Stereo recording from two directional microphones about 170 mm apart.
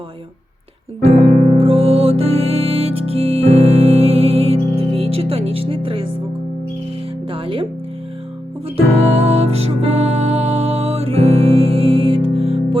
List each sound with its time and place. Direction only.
1.0 s music: 35° right (ahead or behind)
7.3 s music: 30° right (ahead or behind)
9.2 s music: 35° right (ahead or behind)